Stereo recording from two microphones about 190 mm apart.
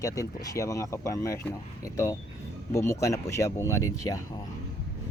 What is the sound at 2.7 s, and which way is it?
Speech, 15° left (ahead or behind).